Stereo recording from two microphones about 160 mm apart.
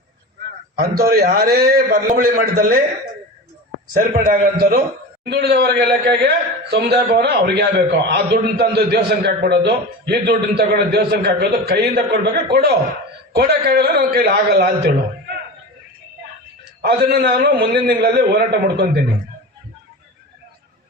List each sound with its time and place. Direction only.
0.8 s a man's voice: 70° right (ahead or behind)
3.9 s a man's voice: 60° right (ahead or behind)
5.3 s a man's voice: 90° right; by 15.4 s 70° right (ahead or behind)
16.8 s a man's voice: 80° right